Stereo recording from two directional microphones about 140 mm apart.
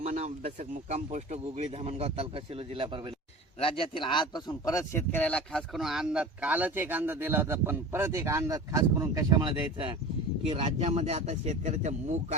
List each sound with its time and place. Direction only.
0.0 s speech: 55° right (ahead or behind); by 3.0 s 40° right (ahead or behind)
3.6 s speech: 40° left (ahead or behind); by 9.9 s 35° right (ahead or behind)
10.4 s speech: 50° right (ahead or behind)